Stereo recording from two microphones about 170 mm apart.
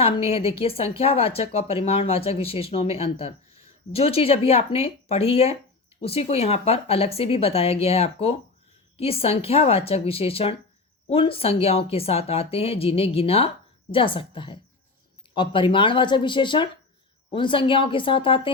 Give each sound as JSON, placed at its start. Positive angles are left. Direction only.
{"t": 0.0, "sound": "a woman's voice", "side_deg": 35}